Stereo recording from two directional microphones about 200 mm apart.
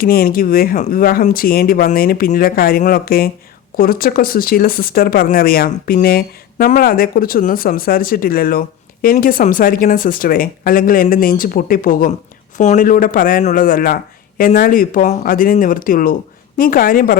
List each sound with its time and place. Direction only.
0.0 s speech: 45° left (ahead or behind)